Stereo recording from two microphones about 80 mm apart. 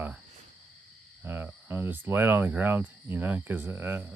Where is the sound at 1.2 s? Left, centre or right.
Right.